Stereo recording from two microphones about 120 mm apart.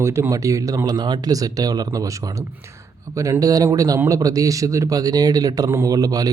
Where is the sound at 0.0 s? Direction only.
25° right (ahead or behind).